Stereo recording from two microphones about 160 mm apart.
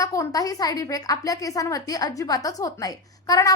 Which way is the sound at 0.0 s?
20° left (ahead or behind).